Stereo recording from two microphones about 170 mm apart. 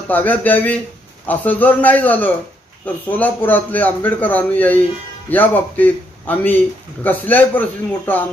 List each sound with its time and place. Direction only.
0.1 s a man's voice: 10° left (ahead or behind)